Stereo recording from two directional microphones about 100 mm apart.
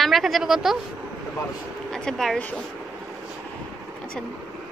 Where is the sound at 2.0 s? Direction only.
5° left (ahead or behind).